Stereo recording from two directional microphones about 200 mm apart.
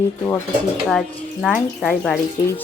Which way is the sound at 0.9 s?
Centre (ahead or behind).